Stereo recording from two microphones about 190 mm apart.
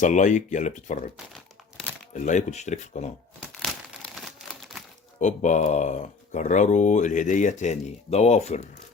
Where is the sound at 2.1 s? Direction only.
40° left (ahead or behind).